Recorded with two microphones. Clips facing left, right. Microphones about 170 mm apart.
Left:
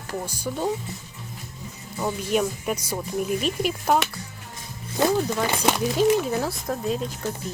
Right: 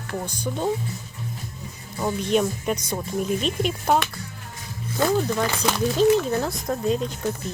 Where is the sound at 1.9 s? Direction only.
5° left (ahead or behind).